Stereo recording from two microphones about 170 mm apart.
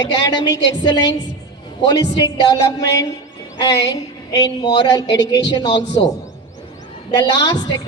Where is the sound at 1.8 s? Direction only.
25° left (ahead or behind).